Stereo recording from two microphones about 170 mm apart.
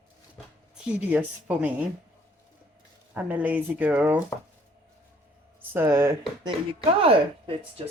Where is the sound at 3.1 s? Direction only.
10° right (ahead or behind).